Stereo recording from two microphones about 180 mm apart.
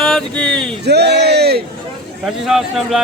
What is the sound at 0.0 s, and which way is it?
Speech, 5° left (ahead or behind).